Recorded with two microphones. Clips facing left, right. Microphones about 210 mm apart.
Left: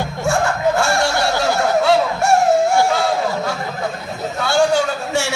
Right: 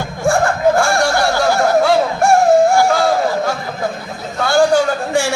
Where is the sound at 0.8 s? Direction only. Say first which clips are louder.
Right 3 dB; 25° left (ahead or behind).